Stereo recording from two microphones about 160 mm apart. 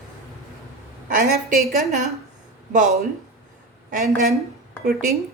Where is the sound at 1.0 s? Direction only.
60° right (ahead or behind).